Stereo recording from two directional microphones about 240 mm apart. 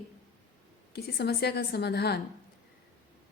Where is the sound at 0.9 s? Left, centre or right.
Left.